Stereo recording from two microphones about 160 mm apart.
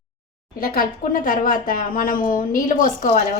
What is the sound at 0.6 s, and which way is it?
A woman's voice, 60° left (ahead or behind).